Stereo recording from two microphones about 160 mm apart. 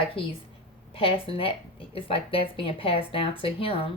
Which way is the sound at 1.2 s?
35° left (ahead or behind).